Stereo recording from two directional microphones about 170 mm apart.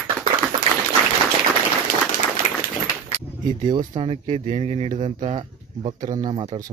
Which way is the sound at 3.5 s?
25° right (ahead or behind).